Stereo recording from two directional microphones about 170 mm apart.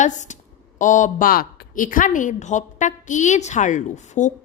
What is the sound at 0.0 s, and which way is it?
A woman's voice, 45° left (ahead or behind).